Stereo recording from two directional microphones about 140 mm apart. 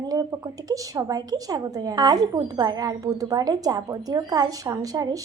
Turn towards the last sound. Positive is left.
turn(degrees=-25)  # may be behind; listen again after turning